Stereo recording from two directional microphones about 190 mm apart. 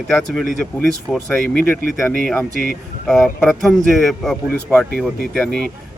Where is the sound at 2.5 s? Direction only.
50° right (ahead or behind).